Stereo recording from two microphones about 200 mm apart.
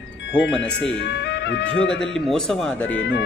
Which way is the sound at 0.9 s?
60° left (ahead or behind).